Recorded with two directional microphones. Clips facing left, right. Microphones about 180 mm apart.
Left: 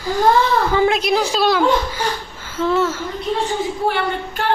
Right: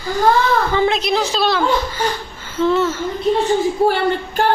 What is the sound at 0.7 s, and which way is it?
A woman's voice, 10° left (ahead or behind).